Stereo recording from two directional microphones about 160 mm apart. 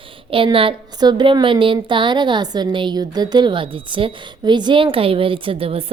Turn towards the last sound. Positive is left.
turn(degrees=-35)  # may be behind; listen again after turning